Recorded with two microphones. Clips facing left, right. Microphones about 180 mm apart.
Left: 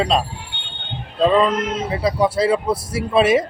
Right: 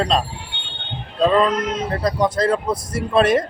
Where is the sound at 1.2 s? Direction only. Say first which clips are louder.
Left 1 dB; centre (ahead or behind).